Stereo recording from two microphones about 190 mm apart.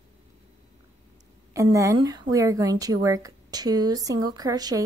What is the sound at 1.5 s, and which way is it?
A woman's voice, 15° right (ahead or behind).